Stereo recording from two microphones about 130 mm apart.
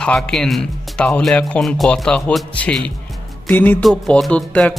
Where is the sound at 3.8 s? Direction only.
5° left (ahead or behind).